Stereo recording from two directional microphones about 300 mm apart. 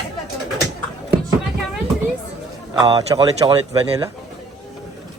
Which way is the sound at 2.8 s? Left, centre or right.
Centre.